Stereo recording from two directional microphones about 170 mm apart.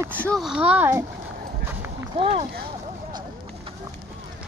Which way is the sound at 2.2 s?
35° right (ahead or behind).